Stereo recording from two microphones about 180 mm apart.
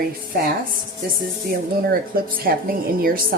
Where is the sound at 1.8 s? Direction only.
55° right (ahead or behind).